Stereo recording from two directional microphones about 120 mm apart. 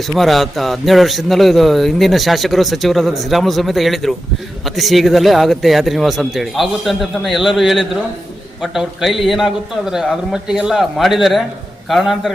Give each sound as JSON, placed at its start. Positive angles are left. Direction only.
{"t": 0.1, "sound": "a man's voice", "side_deg": 0}